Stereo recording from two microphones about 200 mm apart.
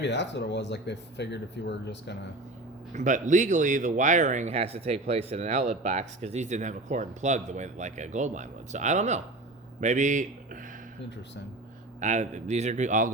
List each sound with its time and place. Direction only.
0.0 s speech: 60° left (ahead or behind)
2.9 s speech: 40° right (ahead or behind)
11.9 s speech: 35° right (ahead or behind)